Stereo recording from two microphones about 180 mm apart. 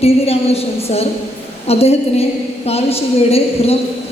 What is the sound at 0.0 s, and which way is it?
A woman's voice, 35° left (ahead or behind).